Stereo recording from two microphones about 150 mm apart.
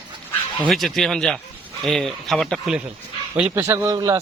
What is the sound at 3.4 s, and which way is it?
Speech, 10° right (ahead or behind).